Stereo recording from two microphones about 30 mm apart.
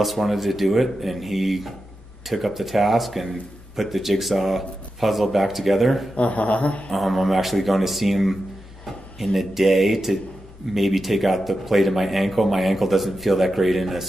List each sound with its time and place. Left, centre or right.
0.0 s a man's voice: centre
6.1 s speech: left
6.9 s a man's voice: centre